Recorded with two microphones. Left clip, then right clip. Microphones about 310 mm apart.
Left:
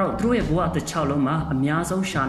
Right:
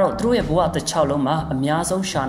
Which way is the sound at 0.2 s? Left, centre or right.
Centre.